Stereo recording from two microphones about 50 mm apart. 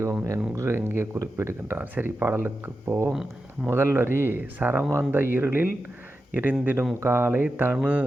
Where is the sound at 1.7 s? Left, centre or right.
Right.